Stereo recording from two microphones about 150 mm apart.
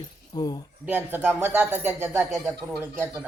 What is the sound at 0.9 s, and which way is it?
Speech, 10° right (ahead or behind).